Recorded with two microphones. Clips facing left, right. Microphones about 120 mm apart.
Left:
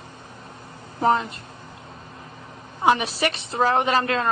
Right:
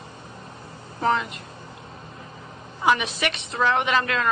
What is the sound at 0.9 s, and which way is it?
Speech, 35° left (ahead or behind).